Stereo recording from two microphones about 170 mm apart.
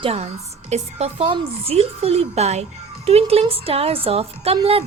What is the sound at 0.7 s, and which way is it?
A woman's voice, 40° right (ahead or behind).